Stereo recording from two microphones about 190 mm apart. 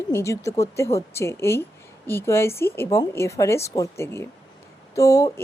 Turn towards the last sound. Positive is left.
turn(degrees=15)  # may be behind; listen again after turning